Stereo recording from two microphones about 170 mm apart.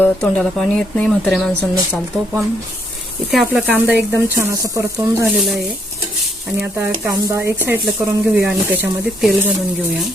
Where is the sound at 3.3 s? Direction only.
Centre (ahead or behind).